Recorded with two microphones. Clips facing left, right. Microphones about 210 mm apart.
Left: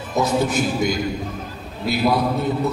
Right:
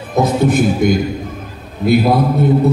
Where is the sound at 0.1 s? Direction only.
55° right (ahead or behind).